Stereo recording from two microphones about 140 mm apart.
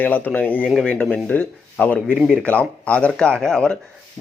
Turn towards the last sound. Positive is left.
turn(degrees=5)  # may be behind; listen again after turning